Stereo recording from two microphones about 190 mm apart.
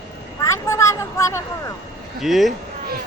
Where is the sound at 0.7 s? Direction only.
15° left (ahead or behind).